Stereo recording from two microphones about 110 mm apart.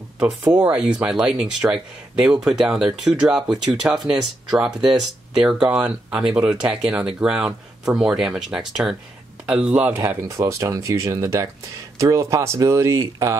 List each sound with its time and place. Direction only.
0.2 s speech: 20° right (ahead or behind)
10.0 s speech: 30° right (ahead or behind)